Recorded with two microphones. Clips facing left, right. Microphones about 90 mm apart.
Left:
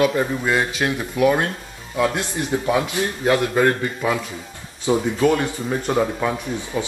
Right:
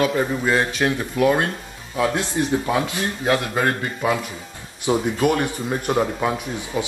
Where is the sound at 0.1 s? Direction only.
5° right (ahead or behind).